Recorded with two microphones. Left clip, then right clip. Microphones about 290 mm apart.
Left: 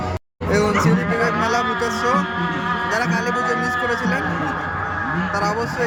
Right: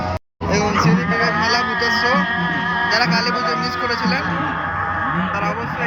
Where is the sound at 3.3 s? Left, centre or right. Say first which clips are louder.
Right 1 dB; left.